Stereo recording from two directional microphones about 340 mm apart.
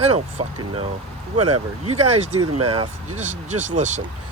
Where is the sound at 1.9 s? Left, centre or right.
Centre.